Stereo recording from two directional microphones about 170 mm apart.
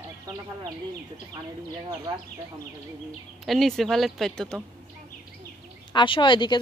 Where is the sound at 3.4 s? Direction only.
Centre (ahead or behind).